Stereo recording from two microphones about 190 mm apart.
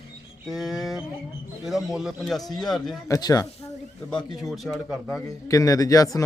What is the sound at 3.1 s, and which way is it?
Speech, 20° left (ahead or behind).